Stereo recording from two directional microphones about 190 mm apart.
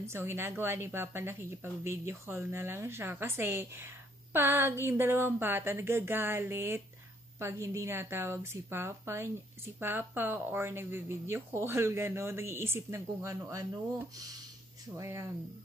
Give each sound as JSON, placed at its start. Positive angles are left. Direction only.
{"t": 0.0, "sound": "a woman's voice", "side_deg": -15}